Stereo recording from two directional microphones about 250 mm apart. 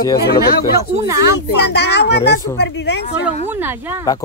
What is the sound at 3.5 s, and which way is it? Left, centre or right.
Speech, centre.